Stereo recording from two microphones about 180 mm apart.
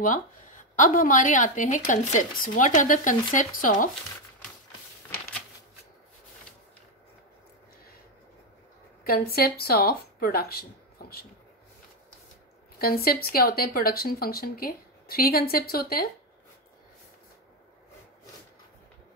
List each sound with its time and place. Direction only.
0.0 s speech: 45° left (ahead or behind)
9.0 s speech: 55° left (ahead or behind)
12.7 s speech: 55° left (ahead or behind)